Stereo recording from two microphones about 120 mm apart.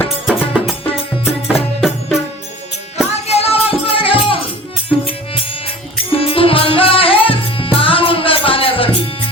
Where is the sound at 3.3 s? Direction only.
55° left (ahead or behind).